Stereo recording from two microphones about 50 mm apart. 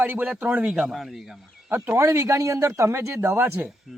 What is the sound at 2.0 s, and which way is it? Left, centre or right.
Speech, right.